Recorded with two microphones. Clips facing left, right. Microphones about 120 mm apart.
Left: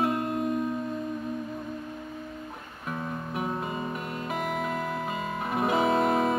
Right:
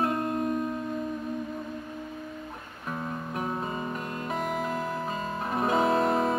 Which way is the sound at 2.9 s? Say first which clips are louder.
Even; centre (ahead or behind).